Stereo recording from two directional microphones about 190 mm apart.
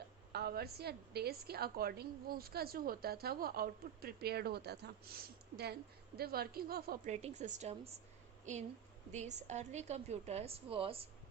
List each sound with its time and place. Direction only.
0.3 s a woman's voice: 55° right (ahead or behind)
6.1 s a woman's voice: 55° right (ahead or behind)
7.1 s a woman's voice: 35° right (ahead or behind)
9.1 s a woman's voice: 40° right (ahead or behind)